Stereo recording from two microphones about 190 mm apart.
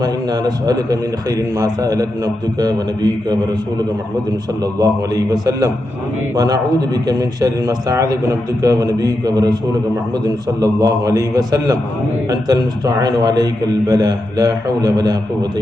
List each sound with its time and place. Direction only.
0.0 s a man's voice: 20° right (ahead or behind)
4.6 s a man's voice: 20° right (ahead or behind)